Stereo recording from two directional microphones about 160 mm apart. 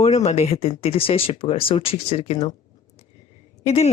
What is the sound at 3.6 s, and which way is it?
Speech, 40° left (ahead or behind).